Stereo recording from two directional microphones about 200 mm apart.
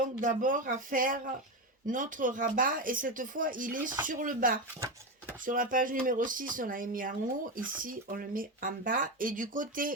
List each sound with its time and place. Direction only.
0.2 s speech: 40° right (ahead or behind)